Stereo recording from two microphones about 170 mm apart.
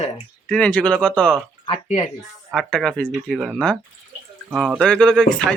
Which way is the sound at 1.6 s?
40° left (ahead or behind).